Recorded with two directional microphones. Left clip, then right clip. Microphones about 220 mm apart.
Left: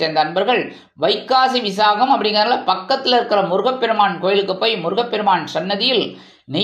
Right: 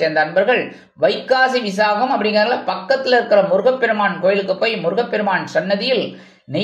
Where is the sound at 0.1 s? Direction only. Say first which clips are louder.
Right 1 dB; 20° left (ahead or behind).